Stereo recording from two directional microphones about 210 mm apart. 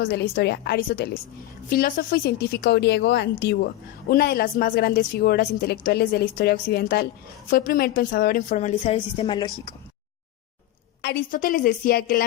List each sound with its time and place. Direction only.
0.0 s a woman's voice: 50° left (ahead or behind); by 9.5 s 20° left (ahead or behind)
11.0 s a woman's voice: 45° left (ahead or behind)